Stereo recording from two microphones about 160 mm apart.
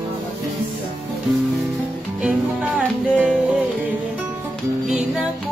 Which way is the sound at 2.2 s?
5° right (ahead or behind).